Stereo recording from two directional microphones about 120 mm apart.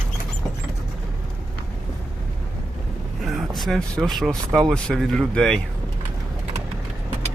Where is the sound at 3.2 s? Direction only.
Centre (ahead or behind).